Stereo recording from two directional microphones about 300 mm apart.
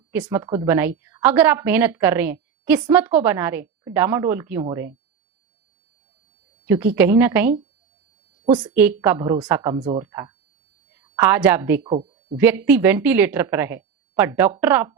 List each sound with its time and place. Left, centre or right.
0.1 s a woman's voice: centre
6.7 s a woman's voice: centre
11.9 s a sound: centre
12.4 s a woman's voice: centre